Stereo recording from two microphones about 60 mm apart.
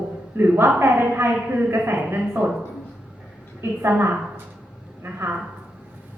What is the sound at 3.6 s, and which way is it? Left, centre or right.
Speech, right.